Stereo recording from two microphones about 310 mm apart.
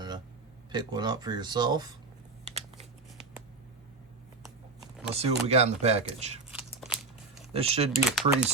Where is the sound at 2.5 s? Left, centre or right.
Right.